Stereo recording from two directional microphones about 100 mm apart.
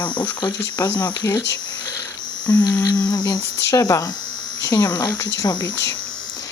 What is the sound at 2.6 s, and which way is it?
Speech, 45° left (ahead or behind).